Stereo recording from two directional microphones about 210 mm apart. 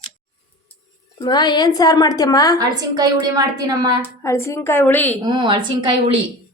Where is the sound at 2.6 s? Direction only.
20° right (ahead or behind).